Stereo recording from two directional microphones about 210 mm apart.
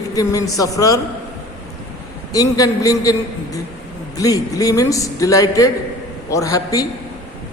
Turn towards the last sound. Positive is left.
turn(degrees=15)  # may be behind; listen again after turning